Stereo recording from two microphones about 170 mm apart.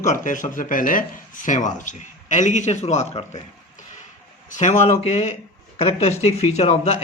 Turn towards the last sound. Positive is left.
turn(degrees=40)  # may be behind; listen again after turning